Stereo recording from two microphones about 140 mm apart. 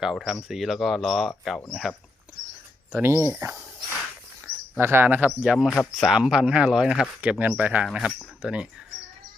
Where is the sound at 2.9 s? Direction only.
15° right (ahead or behind).